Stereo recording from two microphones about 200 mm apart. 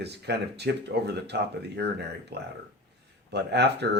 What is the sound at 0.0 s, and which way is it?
Speech, 55° right (ahead or behind).